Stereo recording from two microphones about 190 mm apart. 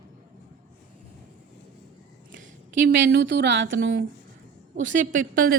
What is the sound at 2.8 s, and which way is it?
Speech, 65° right (ahead or behind).